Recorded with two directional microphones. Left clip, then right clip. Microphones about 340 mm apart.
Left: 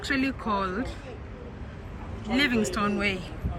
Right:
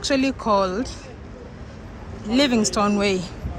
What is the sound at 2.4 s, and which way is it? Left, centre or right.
Speech, centre.